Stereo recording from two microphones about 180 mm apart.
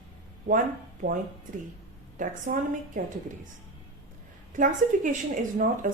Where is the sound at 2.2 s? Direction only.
45° right (ahead or behind).